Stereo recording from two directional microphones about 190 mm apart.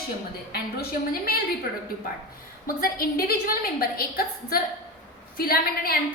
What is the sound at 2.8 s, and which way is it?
A woman's voice, 50° left (ahead or behind).